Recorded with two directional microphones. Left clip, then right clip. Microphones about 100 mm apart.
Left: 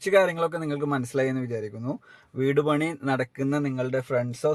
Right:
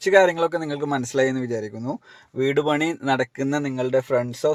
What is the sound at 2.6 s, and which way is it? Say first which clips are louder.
Speech: right 4 dB; 20° right (ahead or behind).